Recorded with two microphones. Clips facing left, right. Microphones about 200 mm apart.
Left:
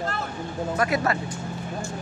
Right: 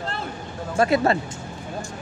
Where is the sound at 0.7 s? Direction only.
30° right (ahead or behind).